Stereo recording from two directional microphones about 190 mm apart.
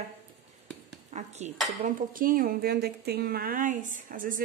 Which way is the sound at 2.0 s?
50° right (ahead or behind).